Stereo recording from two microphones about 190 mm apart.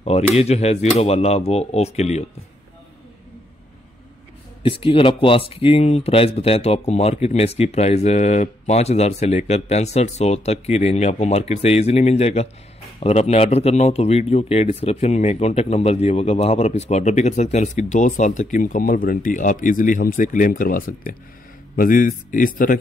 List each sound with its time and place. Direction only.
0.0 s speech: 35° left (ahead or behind)
4.6 s speech: 30° left (ahead or behind); by 22.8 s 45° left (ahead or behind)